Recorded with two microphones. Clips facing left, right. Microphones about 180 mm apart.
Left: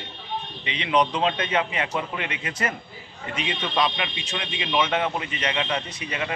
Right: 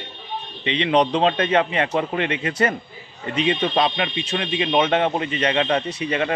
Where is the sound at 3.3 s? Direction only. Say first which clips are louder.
Right 6 dB; 30° right (ahead or behind).